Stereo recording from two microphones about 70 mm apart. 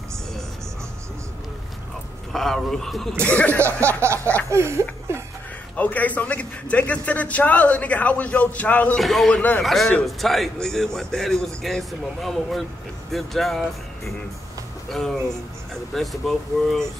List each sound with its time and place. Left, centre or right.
2.3 s a man's voice: centre
3.3 s a man's voice: left
4.0 s a sound: right
5.8 s a man's voice: left
8.9 s a man's voice: centre
9.3 s a man's voice: left
9.6 s a man's voice: centre
14.9 s a man's voice: centre